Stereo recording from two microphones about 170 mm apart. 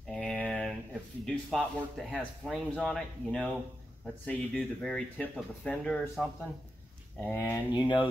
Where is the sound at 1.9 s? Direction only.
Centre (ahead or behind).